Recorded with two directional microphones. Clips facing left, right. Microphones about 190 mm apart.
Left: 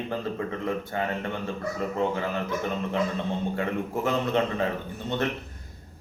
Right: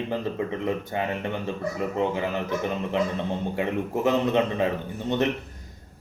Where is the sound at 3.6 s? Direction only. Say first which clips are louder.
Right 2 dB; 20° right (ahead or behind).